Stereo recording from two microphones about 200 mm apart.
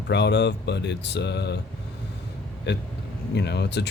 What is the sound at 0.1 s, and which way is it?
Speech, 60° left (ahead or behind).